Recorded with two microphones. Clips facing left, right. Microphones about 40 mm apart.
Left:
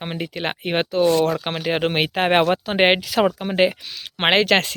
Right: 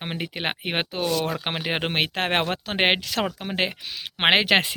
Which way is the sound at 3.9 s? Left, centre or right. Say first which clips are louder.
Left 2 dB; centre.